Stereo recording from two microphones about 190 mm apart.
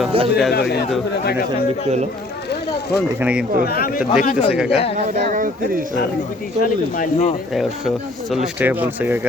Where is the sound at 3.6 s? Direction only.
55° left (ahead or behind).